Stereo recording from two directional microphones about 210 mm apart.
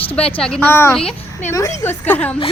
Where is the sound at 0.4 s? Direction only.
5° left (ahead or behind).